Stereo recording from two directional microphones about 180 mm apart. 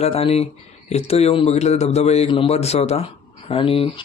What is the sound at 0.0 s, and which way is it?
Speech, 35° left (ahead or behind).